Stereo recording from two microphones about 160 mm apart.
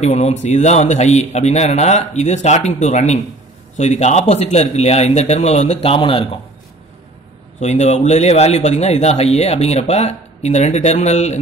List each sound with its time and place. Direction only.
0.0 s speech: 45° left (ahead or behind)
7.6 s speech: 45° left (ahead or behind)